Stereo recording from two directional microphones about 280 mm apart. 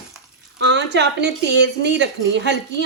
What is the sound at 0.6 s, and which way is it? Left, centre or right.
A woman's voice, right.